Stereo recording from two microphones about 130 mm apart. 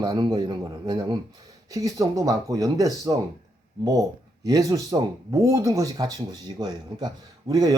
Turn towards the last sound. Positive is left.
turn(degrees=-30)  # may be behind; listen again after turning